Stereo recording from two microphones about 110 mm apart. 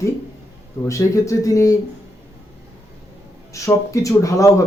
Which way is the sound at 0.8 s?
30° left (ahead or behind).